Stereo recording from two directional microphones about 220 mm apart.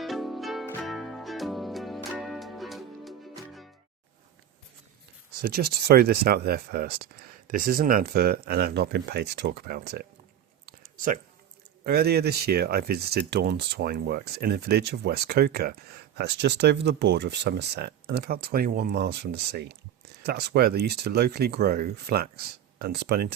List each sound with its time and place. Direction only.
0.0 s music: centre (ahead or behind)
5.4 s speech: 45° right (ahead or behind)
10.7 s a sound: 40° right (ahead or behind)
11.9 s speech: 45° right (ahead or behind)